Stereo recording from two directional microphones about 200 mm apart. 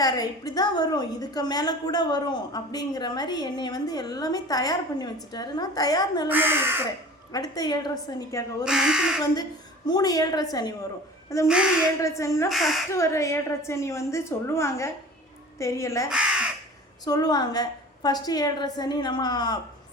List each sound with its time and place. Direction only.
0.0 s a woman's voice: 20° left (ahead or behind)
6.2 s speech: 10° right (ahead or behind)
7.3 s a woman's voice: 20° left (ahead or behind)
8.6 s speech: 5° right (ahead or behind)
9.3 s a woman's voice: 20° left (ahead or behind)
11.4 s speech: 5° right (ahead or behind)
12.0 s a woman's voice: 15° left (ahead or behind)
12.5 s speech: centre (ahead or behind)
12.9 s a woman's voice: 15° left (ahead or behind)
16.0 s crow: 5° right (ahead or behind)
17.1 s a woman's voice: 20° left (ahead or behind)